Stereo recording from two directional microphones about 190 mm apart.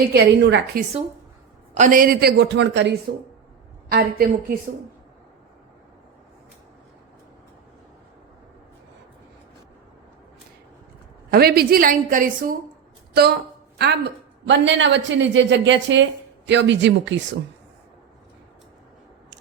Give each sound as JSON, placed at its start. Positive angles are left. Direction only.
{"t": 0.1, "sound": "a woman's voice", "side_deg": -65}
{"t": 1.7, "sound": "a woman's voice", "side_deg": -45}
{"t": 3.8, "sound": "a woman's voice", "side_deg": -55}
{"t": 11.3, "sound": "a woman's voice", "side_deg": -55}
{"t": 13.7, "sound": "a woman's voice", "side_deg": -60}